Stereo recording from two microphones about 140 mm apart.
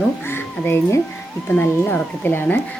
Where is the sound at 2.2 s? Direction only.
15° left (ahead or behind).